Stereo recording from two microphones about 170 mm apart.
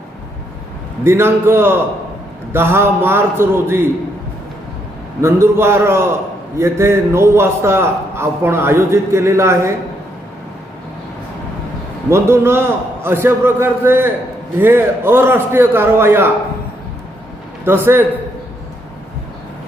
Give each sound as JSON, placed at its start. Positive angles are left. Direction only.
{"t": 1.0, "sound": "a man's voice", "side_deg": -15}
{"t": 5.2, "sound": "a man's voice", "side_deg": -15}
{"t": 12.0, "sound": "a man's voice", "side_deg": -15}
{"t": 17.7, "sound": "a man's voice", "side_deg": -15}